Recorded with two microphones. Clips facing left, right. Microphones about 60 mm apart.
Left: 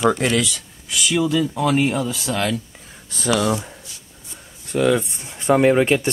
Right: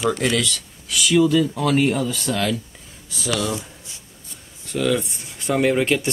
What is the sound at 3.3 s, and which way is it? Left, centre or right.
Speech, left.